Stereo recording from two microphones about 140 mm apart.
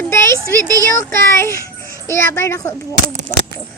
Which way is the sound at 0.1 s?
20° left (ahead or behind).